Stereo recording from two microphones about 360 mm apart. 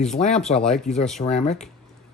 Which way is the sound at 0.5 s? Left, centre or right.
Centre.